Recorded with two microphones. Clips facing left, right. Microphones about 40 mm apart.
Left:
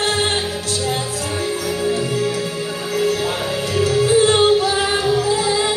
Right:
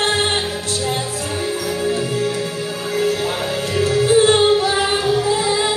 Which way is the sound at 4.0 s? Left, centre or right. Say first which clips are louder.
Right 1 dB; right.